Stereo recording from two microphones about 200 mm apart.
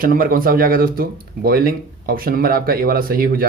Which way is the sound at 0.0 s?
45° right (ahead or behind).